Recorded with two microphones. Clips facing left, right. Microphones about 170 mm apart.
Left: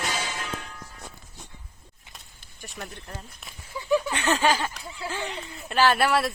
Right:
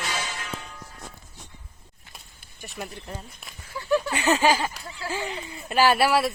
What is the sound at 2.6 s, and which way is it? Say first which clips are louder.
Speech: right 3 dB; 5° right (ahead or behind).